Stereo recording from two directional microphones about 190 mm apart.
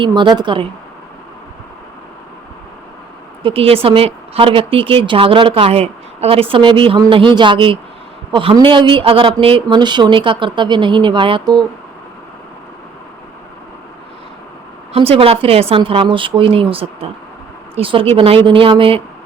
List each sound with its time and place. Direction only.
0.0 s a woman's voice: 25° right (ahead or behind)
3.4 s a woman's voice: 30° right (ahead or behind)
14.9 s a woman's voice: 30° right (ahead or behind)